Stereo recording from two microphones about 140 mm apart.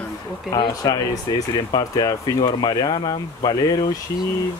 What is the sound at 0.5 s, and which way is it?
Speech, 30° left (ahead or behind).